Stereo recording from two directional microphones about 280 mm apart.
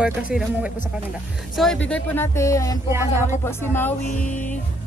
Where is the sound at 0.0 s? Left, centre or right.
Centre.